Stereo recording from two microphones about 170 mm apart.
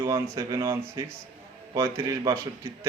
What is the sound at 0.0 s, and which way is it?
Speech, 20° right (ahead or behind).